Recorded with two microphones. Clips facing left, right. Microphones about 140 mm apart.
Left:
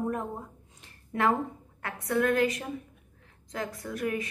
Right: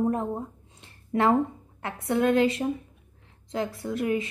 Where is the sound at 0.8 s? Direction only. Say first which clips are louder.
Right 4 dB; 30° right (ahead or behind).